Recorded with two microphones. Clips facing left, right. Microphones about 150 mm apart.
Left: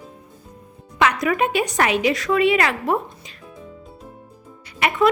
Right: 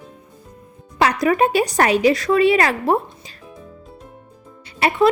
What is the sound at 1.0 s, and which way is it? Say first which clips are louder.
Speech: right 3 dB; 35° right (ahead or behind).